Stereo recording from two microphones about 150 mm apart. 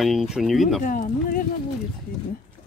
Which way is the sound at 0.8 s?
65° left (ahead or behind).